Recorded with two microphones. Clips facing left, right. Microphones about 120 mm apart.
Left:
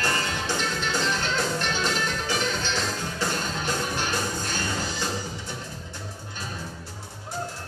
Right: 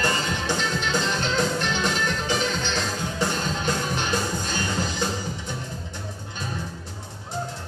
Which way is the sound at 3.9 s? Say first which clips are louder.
Right 2 dB; 15° right (ahead or behind).